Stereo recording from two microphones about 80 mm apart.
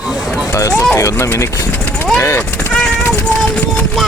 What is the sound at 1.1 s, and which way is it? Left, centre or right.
Speech, left.